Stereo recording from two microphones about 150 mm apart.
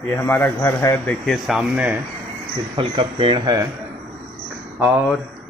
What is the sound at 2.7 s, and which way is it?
Speech, 35° right (ahead or behind).